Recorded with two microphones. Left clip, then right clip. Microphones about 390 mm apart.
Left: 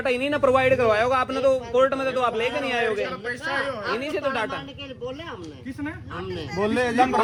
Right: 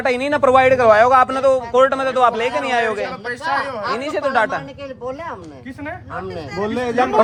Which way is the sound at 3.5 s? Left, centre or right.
Right.